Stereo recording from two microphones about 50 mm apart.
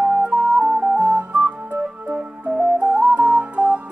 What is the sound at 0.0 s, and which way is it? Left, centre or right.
Music, right.